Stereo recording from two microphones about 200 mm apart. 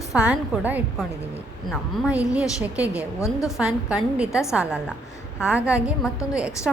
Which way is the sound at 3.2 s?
15° left (ahead or behind).